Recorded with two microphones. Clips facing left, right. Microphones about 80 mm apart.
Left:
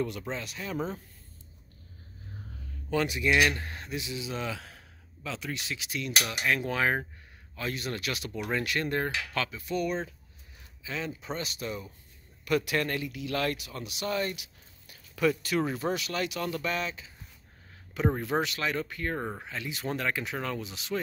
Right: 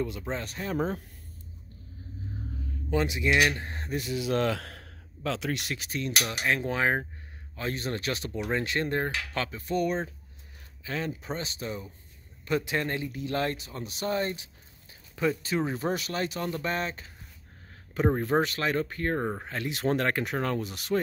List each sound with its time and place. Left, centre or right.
0.0 s speech: centre
0.3 s speech: right
2.9 s speech: right
4.0 s speech: right
5.8 s speech: right
18.0 s speech: right
19.1 s speech: centre
19.4 s speech: right